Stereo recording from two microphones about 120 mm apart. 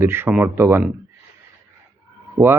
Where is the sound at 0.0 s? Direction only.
20° right (ahead or behind).